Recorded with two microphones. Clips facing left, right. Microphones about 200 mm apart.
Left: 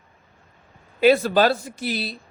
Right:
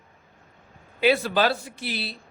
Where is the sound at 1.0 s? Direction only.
45° left (ahead or behind).